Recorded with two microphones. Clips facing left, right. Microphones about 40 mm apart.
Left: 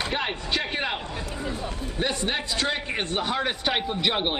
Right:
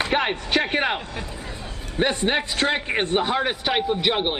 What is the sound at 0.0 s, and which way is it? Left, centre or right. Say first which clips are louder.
Speech: right 5 dB; right.